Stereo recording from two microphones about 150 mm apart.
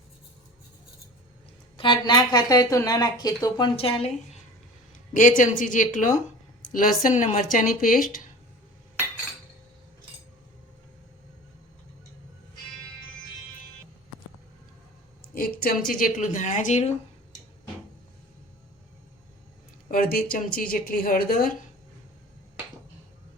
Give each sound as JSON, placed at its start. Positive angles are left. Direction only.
{"t": 1.7, "sound": "a woman's voice", "side_deg": 30}
{"t": 3.8, "sound": "speech", "side_deg": 40}
{"t": 5.1, "sound": "speech", "side_deg": 60}
{"t": 15.4, "sound": "speech", "side_deg": 75}
{"t": 16.2, "sound": "speech", "side_deg": 55}
{"t": 19.9, "sound": "speech", "side_deg": 70}